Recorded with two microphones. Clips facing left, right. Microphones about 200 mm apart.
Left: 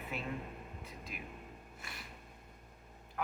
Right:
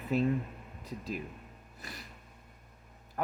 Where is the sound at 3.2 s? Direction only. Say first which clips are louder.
Right 5 dB; 40° right (ahead or behind).